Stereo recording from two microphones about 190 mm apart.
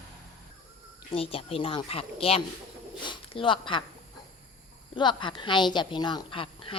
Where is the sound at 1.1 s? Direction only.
30° left (ahead or behind).